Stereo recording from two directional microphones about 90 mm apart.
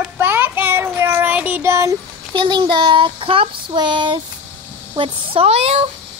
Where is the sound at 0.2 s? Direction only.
25° right (ahead or behind).